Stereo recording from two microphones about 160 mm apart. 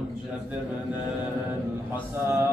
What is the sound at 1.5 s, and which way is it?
Mantra, 15° right (ahead or behind).